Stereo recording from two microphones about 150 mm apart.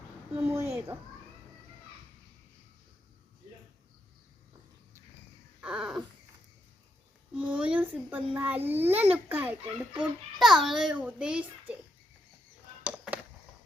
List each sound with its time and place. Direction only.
0.4 s speech: 20° right (ahead or behind)
5.5 s a sound: 5° right (ahead or behind)
7.3 s a child's voice: 10° right (ahead or behind)